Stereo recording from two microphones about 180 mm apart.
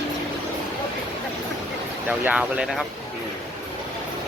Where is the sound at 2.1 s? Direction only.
5° right (ahead or behind).